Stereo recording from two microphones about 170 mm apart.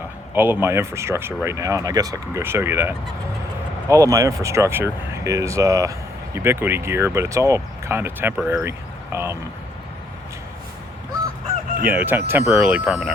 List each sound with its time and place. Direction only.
0.3 s speech: 10° right (ahead or behind)
11.9 s speech: 10° right (ahead or behind)